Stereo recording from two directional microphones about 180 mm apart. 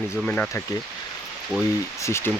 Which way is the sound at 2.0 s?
15° left (ahead or behind).